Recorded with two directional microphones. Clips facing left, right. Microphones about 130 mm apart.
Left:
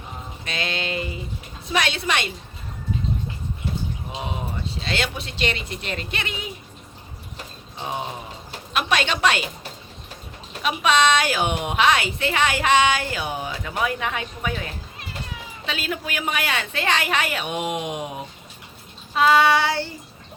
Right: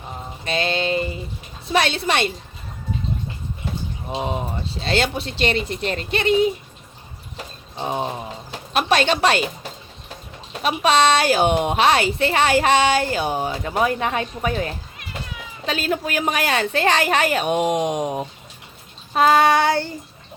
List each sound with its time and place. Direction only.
0.4 s music: 30° right (ahead or behind)
1.7 s a woman's voice: 35° right (ahead or behind)
4.1 s a woman's voice: 40° right (ahead or behind)
8.7 s a woman's voice: 35° right (ahead or behind)
10.6 s a woman's voice: 35° right (ahead or behind)
19.1 s child singing: 45° right (ahead or behind)